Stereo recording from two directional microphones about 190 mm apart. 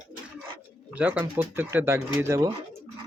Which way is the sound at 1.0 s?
10° right (ahead or behind).